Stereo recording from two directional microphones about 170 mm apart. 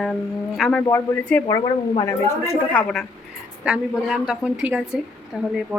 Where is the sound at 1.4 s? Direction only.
20° left (ahead or behind).